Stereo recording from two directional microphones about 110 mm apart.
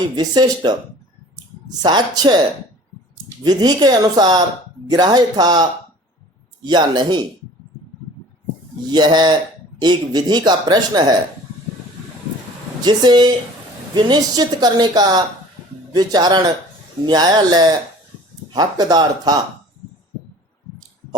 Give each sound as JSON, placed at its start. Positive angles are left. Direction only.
{"t": 0.2, "sound": "a man's voice", "side_deg": -35}
{"t": 3.4, "sound": "a man's voice", "side_deg": -40}
{"t": 8.9, "sound": "a man's voice", "side_deg": -40}
{"t": 12.8, "sound": "a man's voice", "side_deg": -40}